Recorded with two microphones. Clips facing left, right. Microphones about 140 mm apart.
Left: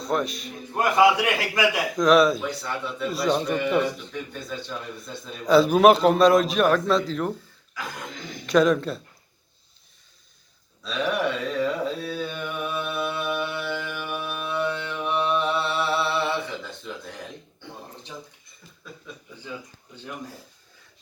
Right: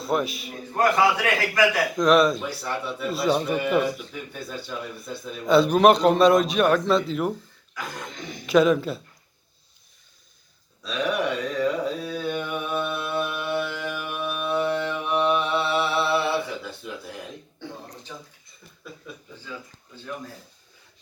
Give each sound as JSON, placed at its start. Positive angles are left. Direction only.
{"t": 0.0, "sound": "a man's voice", "side_deg": -5}
{"t": 0.7, "sound": "a man's voice", "side_deg": 15}
{"t": 2.0, "sound": "a man's voice", "side_deg": 0}
{"t": 10.8, "sound": "a sound", "side_deg": 0}
{"t": 12.2, "sound": "mantra", "side_deg": 0}